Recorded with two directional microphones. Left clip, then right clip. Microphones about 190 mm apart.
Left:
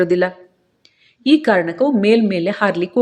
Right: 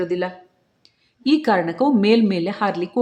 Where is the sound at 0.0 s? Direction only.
25° left (ahead or behind).